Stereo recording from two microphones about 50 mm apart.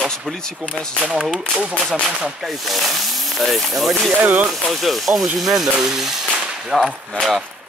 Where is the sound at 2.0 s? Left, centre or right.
Right.